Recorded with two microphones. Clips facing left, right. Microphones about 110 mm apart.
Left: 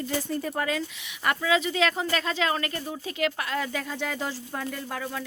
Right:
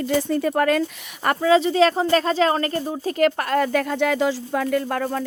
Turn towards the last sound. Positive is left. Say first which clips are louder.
# right 10 dB
turn(degrees=-50)  # may be behind; listen again after turning